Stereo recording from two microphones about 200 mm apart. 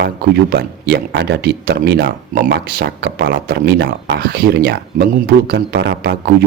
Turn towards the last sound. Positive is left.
turn(degrees=-50)  # may be behind; listen again after turning